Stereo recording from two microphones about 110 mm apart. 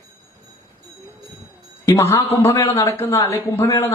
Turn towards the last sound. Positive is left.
turn(degrees=25)  # may be behind; listen again after turning